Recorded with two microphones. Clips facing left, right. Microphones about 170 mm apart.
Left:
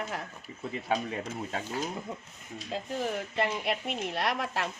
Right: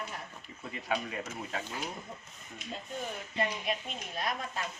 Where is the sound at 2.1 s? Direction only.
90° left.